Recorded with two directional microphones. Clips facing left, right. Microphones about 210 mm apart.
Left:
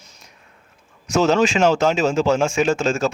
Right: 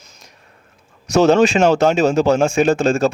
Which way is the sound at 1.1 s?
60° right (ahead or behind).